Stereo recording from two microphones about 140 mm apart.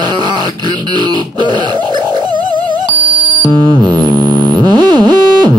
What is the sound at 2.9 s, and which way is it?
Music, 35° right (ahead or behind).